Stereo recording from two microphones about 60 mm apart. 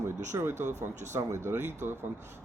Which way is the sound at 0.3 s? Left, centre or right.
Right.